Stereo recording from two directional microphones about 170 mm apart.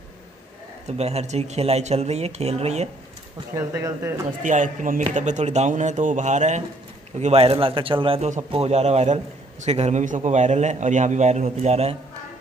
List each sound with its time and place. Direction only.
0.8 s speech: 40° right (ahead or behind)
3.5 s speech: 15° right (ahead or behind)
4.4 s a man's voice: 50° right (ahead or behind)